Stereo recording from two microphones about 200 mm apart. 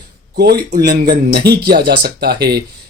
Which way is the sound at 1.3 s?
55° right (ahead or behind).